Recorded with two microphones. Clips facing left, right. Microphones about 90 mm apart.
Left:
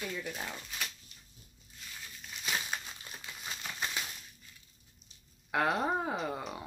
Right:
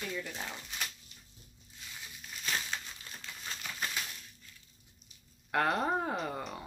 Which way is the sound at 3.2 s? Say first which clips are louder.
Even; 15° left (ahead or behind).